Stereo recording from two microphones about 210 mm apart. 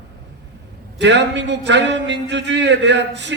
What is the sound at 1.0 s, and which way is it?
A man's voice, 55° right (ahead or behind).